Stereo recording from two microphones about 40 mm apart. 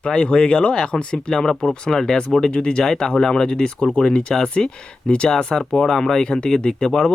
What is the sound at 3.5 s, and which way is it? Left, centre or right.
Speech, left.